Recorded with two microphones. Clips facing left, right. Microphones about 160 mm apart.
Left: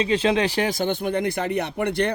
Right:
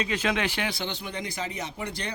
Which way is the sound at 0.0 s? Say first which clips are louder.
Left 7 dB; 30° left (ahead or behind).